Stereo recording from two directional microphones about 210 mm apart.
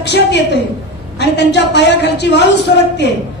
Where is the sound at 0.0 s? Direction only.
55° left (ahead or behind).